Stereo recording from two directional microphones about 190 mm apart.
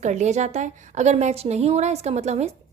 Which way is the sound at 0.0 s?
40° right (ahead or behind).